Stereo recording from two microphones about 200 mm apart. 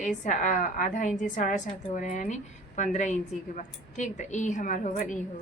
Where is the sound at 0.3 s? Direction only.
40° left (ahead or behind).